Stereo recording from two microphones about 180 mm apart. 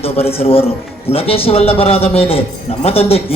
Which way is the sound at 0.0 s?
35° left (ahead or behind).